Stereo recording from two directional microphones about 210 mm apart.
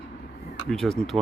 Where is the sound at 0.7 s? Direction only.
Centre (ahead or behind).